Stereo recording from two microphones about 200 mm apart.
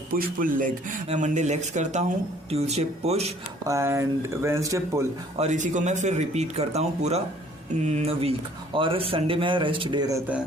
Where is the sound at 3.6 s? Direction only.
15° right (ahead or behind).